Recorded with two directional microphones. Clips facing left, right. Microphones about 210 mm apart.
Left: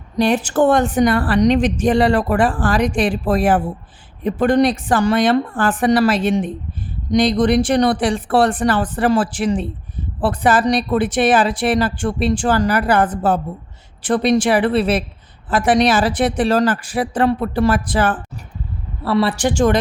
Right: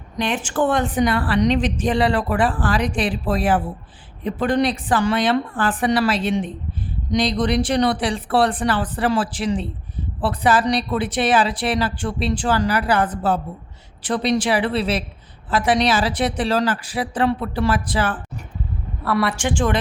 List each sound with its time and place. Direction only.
0.2 s speech: 40° left (ahead or behind)
19.0 s speech: 30° left (ahead or behind)